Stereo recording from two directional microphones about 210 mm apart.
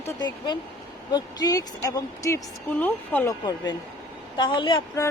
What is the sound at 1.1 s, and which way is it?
A woman's voice, 20° left (ahead or behind).